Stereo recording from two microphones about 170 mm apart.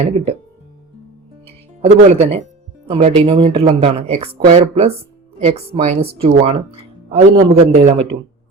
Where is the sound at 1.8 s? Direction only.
40° right (ahead or behind).